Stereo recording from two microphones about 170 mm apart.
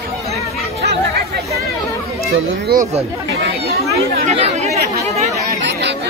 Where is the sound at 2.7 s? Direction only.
60° right (ahead or behind).